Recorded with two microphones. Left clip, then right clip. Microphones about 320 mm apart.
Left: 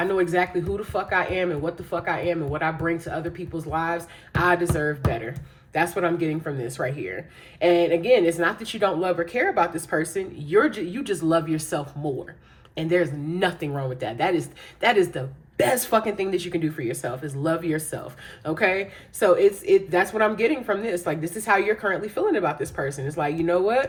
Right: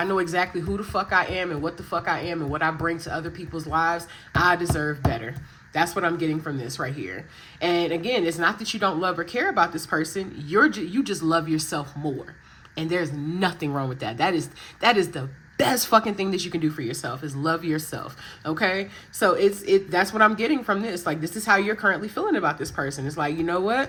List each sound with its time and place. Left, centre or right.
0.0 s a woman's voice: centre